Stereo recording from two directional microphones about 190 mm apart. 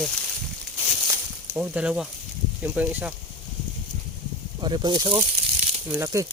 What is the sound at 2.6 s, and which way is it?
Frying, 10° right (ahead or behind).